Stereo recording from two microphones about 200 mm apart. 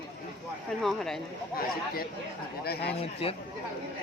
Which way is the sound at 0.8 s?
Centre (ahead or behind).